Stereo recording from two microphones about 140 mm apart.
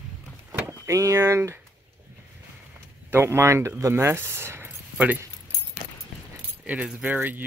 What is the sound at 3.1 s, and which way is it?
Speech, 20° right (ahead or behind).